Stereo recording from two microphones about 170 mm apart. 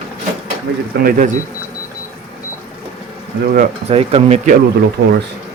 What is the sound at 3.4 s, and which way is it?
Speech, 55° right (ahead or behind).